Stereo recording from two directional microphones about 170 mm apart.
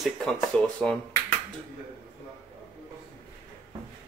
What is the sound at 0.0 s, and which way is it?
Speech, 5° left (ahead or behind).